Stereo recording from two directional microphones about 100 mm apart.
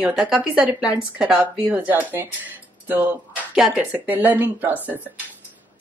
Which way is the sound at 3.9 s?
20° right (ahead or behind).